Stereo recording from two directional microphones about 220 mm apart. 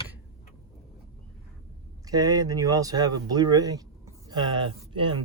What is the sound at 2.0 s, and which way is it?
Speech, 15° right (ahead or behind).